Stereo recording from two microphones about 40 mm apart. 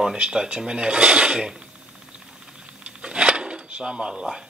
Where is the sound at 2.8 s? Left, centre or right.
Right.